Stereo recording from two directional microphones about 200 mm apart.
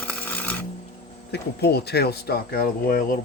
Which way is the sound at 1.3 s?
55° left (ahead or behind).